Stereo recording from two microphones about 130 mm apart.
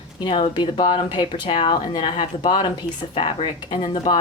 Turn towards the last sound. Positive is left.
turn(degrees=45)  # may be behind; listen again after turning